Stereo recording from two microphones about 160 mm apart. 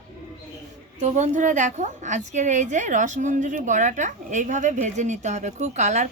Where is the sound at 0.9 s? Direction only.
45° right (ahead or behind).